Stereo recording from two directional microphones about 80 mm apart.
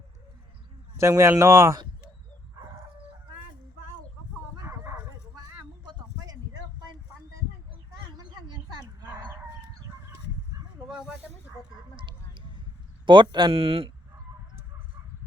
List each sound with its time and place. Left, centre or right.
0.9 s speech: right
4.6 s bow-wow: right
5.3 s a sound: right
9.0 s dog: right
10.8 s roaring cats: centre
11.9 s a sound: right
13.1 s speech: right